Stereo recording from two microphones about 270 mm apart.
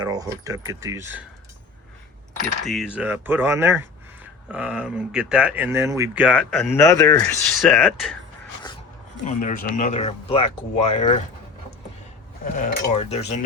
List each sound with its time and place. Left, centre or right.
0.0 s speech: centre
2.6 s speech: centre
9.2 s cutlery: left
12.5 s cutlery: left